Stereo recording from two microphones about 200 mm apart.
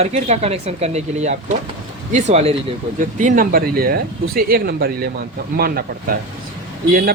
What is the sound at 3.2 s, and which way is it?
Speech, 40° right (ahead or behind).